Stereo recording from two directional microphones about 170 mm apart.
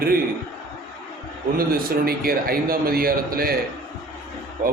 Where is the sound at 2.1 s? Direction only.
60° right (ahead or behind).